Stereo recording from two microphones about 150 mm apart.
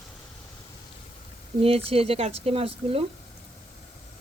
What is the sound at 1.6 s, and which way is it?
Speech, 40° right (ahead or behind).